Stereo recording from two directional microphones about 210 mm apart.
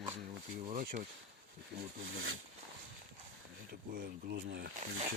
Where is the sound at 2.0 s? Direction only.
70° right (ahead or behind).